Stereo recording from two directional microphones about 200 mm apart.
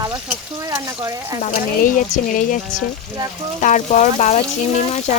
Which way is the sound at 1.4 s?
35° left (ahead or behind).